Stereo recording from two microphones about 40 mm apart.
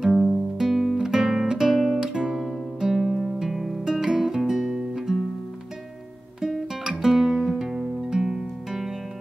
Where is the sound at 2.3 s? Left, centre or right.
Centre.